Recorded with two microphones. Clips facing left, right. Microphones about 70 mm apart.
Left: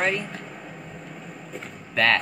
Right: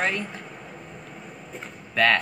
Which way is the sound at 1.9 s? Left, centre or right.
Centre.